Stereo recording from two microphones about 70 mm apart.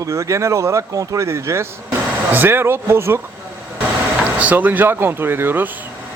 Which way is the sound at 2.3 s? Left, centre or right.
Right.